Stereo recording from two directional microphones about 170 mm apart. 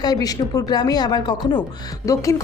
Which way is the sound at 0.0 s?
20° left (ahead or behind).